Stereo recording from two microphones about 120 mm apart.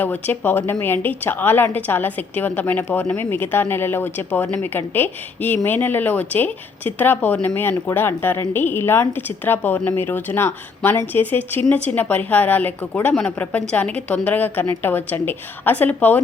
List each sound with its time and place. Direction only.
0.0 s speech: 15° left (ahead or behind)